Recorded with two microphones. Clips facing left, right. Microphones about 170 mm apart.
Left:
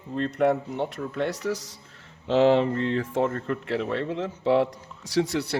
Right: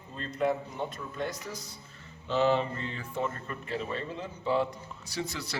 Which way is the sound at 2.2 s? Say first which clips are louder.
Left 7 dB; 90° left.